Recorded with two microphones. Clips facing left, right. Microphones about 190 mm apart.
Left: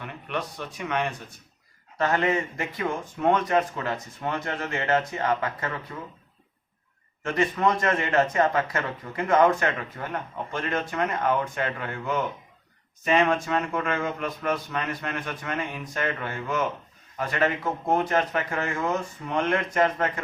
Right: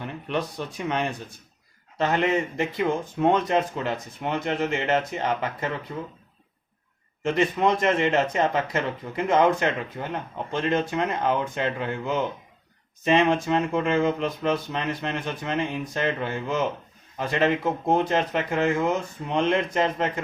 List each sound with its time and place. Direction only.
0.0 s speech: 30° right (ahead or behind)
2.0 s speech: 20° right (ahead or behind)
7.2 s speech: 20° right (ahead or behind)